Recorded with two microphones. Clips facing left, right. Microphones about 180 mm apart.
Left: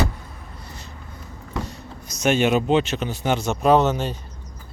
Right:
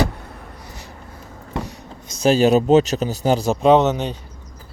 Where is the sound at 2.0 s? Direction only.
30° right (ahead or behind).